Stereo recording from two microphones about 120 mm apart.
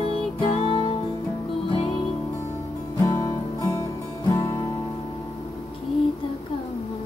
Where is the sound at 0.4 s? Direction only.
45° left (ahead or behind).